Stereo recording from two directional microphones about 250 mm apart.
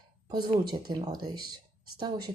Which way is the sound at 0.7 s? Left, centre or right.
Centre.